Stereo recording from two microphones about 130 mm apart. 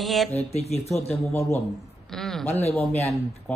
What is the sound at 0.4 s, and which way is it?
Speech, 55° left (ahead or behind).